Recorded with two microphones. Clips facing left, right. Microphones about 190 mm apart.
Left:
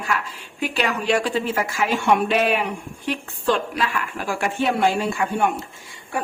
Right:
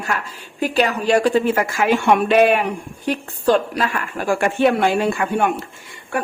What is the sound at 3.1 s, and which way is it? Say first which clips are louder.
A woman's voice: right 5 dB; 40° right (ahead or behind).